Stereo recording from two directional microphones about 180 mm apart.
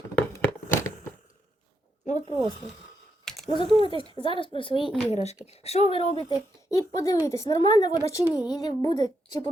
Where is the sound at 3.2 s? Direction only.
Centre (ahead or behind).